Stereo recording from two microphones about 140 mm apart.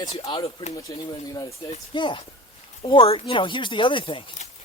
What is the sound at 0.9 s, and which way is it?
Speech, 30° left (ahead or behind).